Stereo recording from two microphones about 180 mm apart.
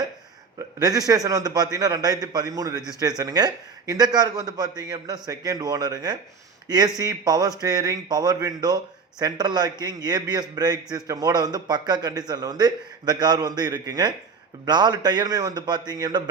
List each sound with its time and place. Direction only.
0.8 s a man's voice: 20° right (ahead or behind)